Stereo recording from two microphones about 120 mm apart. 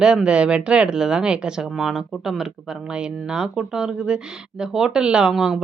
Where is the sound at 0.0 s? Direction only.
5° right (ahead or behind).